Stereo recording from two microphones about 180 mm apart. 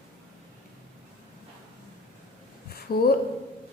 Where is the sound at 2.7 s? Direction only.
55° left (ahead or behind).